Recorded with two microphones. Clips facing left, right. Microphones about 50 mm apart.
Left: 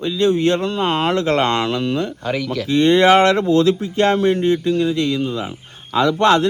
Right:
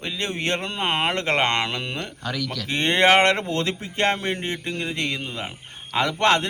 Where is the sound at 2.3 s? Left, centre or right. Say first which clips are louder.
Left 6 dB; left.